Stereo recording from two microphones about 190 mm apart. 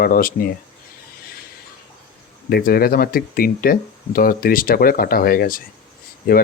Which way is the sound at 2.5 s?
50° left (ahead or behind).